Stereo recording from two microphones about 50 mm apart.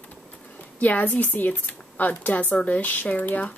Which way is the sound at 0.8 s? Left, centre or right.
Left.